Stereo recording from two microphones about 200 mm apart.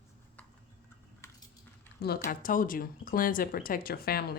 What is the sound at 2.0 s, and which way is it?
A woman's voice, 50° left (ahead or behind).